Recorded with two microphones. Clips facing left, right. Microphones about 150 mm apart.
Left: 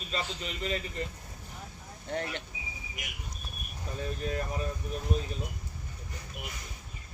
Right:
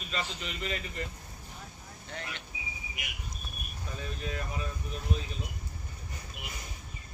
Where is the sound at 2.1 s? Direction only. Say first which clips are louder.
Left 8 dB; 55° left (ahead or behind).